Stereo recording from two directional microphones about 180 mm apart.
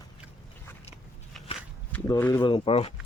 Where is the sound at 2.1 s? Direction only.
20° left (ahead or behind).